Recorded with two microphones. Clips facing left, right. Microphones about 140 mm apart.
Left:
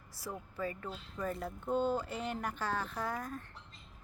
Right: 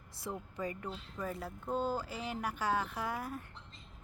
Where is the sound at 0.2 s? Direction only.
20° right (ahead or behind).